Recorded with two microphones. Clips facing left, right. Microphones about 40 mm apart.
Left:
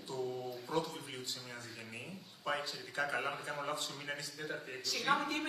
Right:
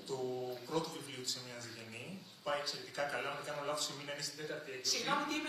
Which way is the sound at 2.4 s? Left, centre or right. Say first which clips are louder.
Left 1 dB; left.